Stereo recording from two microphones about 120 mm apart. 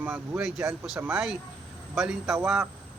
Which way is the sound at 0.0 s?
10° right (ahead or behind).